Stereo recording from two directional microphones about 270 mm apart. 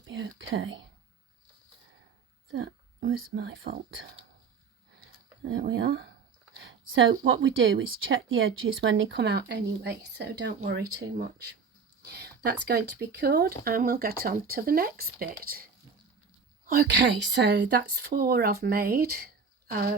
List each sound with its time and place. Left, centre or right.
0.1 s whispering: right
3.0 s speech: right
5.4 s speech: right
16.6 s speech: right